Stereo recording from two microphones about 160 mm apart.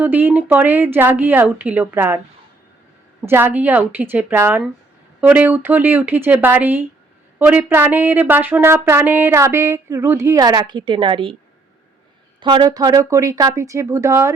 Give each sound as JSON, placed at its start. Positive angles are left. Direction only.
{"t": 0.0, "sound": "speech", "side_deg": -10}
{"t": 12.4, "sound": "speech", "side_deg": -30}